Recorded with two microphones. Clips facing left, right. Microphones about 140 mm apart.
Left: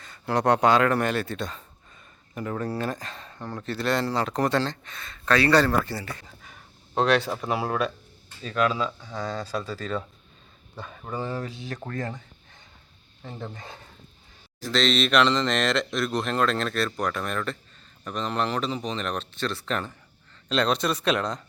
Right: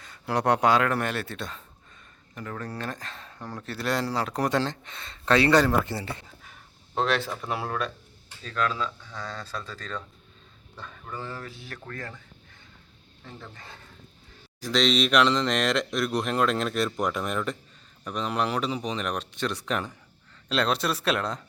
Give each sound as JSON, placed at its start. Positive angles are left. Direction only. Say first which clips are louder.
{"t": 0.0, "sound": "speech", "louder": "left 2 dB", "side_deg": -10}
{"t": 2.3, "sound": "speech", "louder": "left 6 dB", "side_deg": 10}
{"t": 6.4, "sound": "a sound", "louder": "left 2 dB", "side_deg": 0}
{"t": 7.4, "sound": "speech", "louder": "left 4 dB", "side_deg": 5}
{"t": 11.0, "sound": "speech", "louder": "left 6 dB", "side_deg": 15}
{"t": 13.2, "sound": "speech", "louder": "left 6 dB", "side_deg": 25}
{"t": 14.6, "sound": "speech", "louder": "even", "side_deg": -10}